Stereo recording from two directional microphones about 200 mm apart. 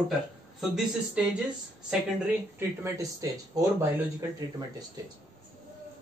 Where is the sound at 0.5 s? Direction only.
Centre (ahead or behind).